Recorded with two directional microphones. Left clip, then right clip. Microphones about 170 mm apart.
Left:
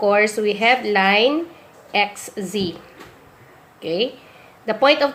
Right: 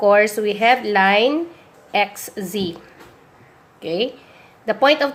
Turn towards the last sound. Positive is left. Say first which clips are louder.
# even
turn(degrees=-20)  # may be behind; listen again after turning